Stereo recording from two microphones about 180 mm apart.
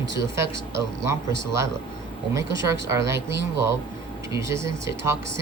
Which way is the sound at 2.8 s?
15° right (ahead or behind).